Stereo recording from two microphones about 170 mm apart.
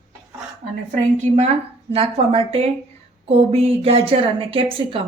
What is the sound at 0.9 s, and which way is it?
A woman's voice, 45° right (ahead or behind).